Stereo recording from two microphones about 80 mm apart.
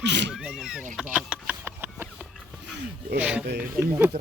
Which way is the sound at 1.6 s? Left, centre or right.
Right.